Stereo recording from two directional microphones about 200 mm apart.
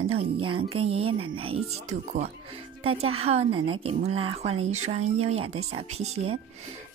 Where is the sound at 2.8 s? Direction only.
30° right (ahead or behind).